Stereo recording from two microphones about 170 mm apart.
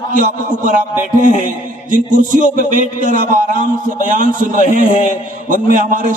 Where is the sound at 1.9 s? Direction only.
50° right (ahead or behind).